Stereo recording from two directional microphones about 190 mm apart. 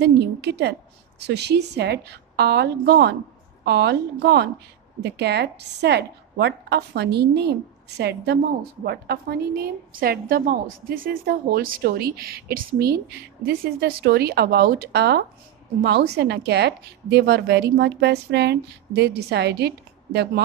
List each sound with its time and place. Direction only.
0.0 s a woman's voice: 60° right (ahead or behind)